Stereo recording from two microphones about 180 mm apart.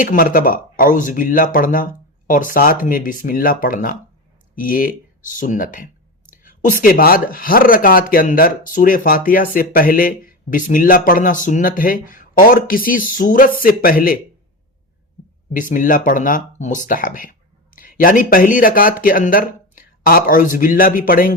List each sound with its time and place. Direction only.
0.0 s speech: 50° left (ahead or behind)
15.5 s speech: 50° left (ahead or behind)